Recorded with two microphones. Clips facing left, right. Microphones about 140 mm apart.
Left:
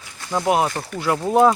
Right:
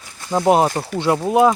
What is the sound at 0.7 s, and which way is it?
Speech, 20° right (ahead or behind).